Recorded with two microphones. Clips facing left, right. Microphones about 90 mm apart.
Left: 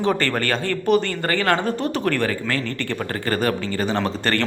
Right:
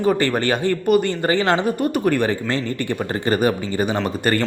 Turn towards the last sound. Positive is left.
turn(degrees=-10)  # may be behind; listen again after turning